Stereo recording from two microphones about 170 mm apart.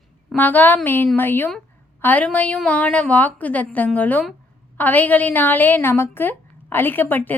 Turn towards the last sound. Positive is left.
turn(degrees=10)  # may be behind; listen again after turning